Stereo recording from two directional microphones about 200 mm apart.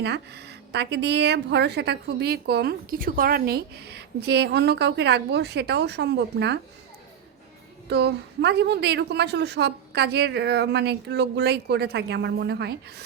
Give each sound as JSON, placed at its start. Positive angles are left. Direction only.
{"t": 0.0, "sound": "a woman's voice", "side_deg": -55}
{"t": 7.9, "sound": "a woman's voice", "side_deg": -55}